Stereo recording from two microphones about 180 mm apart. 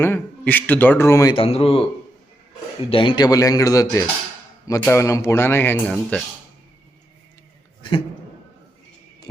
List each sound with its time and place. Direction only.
0.0 s speech: 10° left (ahead or behind)
1.4 s speech: 30° left (ahead or behind)
2.9 s speech: 25° left (ahead or behind); by 6.2 s 5° left (ahead or behind)
7.8 s a sound: 25° left (ahead or behind)